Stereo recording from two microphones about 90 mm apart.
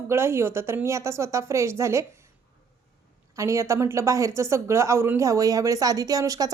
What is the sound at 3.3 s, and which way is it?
A woman's voice, 35° right (ahead or behind).